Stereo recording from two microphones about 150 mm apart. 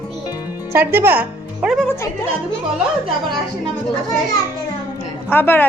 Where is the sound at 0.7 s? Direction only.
15° right (ahead or behind).